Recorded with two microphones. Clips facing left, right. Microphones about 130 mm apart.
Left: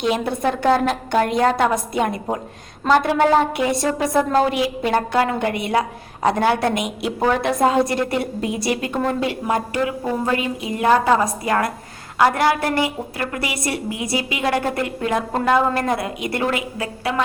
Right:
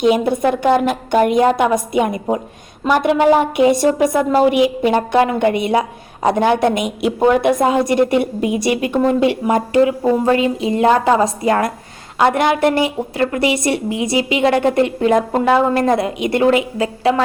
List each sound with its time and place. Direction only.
0.0 s a woman's voice: 20° right (ahead or behind)